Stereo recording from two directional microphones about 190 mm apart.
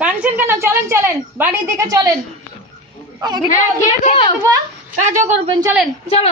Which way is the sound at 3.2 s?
20° right (ahead or behind).